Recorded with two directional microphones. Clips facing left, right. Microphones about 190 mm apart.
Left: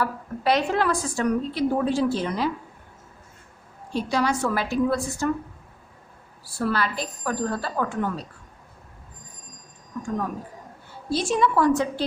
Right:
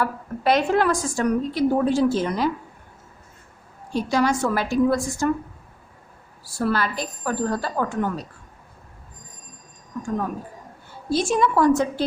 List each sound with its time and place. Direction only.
0.0 s a woman's voice: 50° right (ahead or behind)
3.9 s a woman's voice: 45° right (ahead or behind)
6.6 s a woman's voice: 45° right (ahead or behind)
11.1 s a woman's voice: 45° right (ahead or behind)